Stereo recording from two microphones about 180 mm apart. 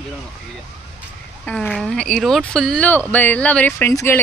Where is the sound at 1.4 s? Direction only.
5° left (ahead or behind).